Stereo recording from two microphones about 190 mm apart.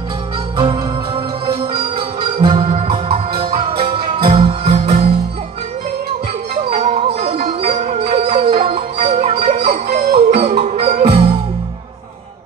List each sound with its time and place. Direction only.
0.6 s music: 25° right (ahead or behind)
6.5 s music: 30° right (ahead or behind)
9.8 s music: 55° right (ahead or behind)
10.1 s music: 30° right (ahead or behind)